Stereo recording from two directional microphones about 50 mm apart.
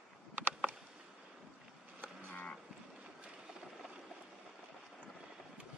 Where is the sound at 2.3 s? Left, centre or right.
Left.